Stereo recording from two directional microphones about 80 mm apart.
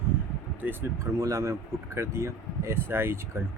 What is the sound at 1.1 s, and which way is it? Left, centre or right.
Speech, right.